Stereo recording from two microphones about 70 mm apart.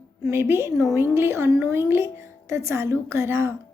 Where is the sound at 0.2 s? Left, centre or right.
Right.